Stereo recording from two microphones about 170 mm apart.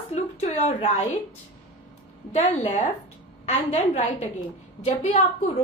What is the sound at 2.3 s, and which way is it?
A woman's voice, 40° left (ahead or behind).